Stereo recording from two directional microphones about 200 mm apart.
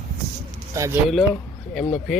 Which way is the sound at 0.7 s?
15° right (ahead or behind).